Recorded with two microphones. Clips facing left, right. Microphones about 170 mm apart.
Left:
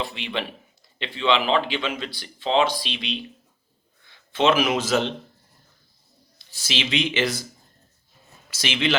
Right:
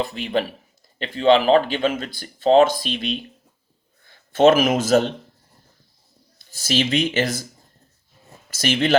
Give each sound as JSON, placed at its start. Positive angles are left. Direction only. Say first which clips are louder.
{"t": 0.0, "sound": "speech", "louder": "right 6 dB", "side_deg": -45}
{"t": 6.5, "sound": "speech", "louder": "right 6 dB", "side_deg": -45}
{"t": 8.4, "sound": "speech", "louder": "right 5 dB", "side_deg": -45}